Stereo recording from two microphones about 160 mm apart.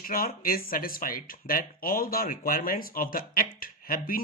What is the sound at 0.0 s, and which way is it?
Speech, 65° left (ahead or behind).